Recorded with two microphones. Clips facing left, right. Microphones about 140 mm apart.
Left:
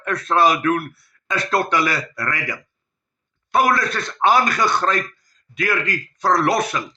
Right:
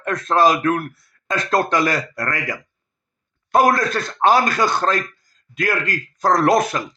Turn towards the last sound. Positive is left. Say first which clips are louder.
# right 3 dB
turn(degrees=-40)  # may be behind; listen again after turning